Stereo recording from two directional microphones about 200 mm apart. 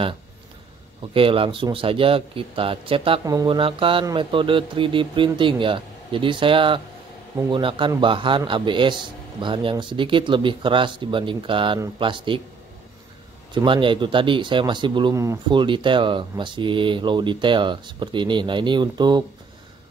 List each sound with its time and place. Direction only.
1.1 s a man's voice: 25° right (ahead or behind)
13.6 s a man's voice: 25° right (ahead or behind)